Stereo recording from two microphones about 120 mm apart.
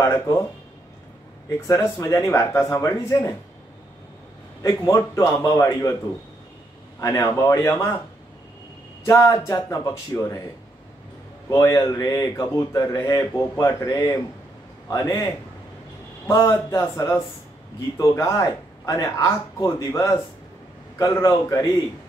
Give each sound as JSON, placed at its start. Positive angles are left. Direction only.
{"t": 0.0, "sound": "speech", "side_deg": 25}
{"t": 1.7, "sound": "speech", "side_deg": 25}
{"t": 4.6, "sound": "speech", "side_deg": 25}
{"t": 7.0, "sound": "speech", "side_deg": 30}
{"t": 9.0, "sound": "speech", "side_deg": 25}
{"t": 11.4, "sound": "speech", "side_deg": 25}
{"t": 16.3, "sound": "speech", "side_deg": 25}